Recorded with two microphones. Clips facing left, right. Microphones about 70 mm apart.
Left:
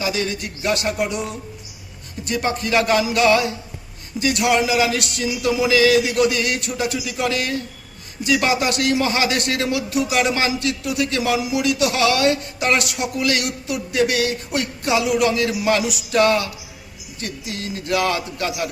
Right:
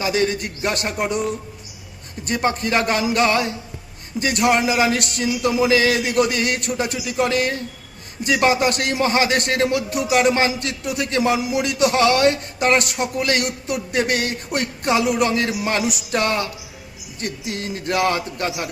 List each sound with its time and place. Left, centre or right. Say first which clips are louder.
0.0 s a man's voice: right 3 dB; right
2.2 s a man's voice: right 1 dB; right